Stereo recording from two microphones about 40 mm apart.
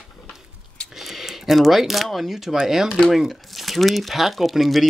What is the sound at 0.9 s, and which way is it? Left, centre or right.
Speech, centre.